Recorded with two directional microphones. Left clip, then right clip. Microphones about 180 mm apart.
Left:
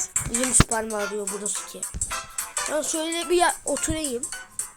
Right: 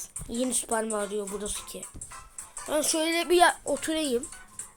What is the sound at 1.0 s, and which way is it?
Speech, 25° left (ahead or behind).